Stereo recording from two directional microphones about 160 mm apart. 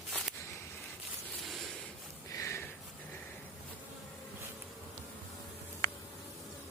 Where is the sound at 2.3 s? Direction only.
20° left (ahead or behind).